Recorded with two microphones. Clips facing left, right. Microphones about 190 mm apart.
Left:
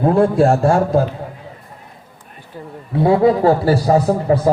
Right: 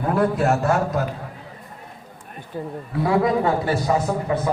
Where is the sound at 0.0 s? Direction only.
30° left (ahead or behind).